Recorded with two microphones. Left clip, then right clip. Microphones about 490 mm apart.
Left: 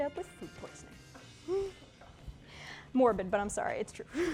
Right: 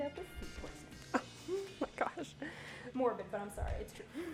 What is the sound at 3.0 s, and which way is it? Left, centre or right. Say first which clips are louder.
A woman's voice: left 9 dB; left.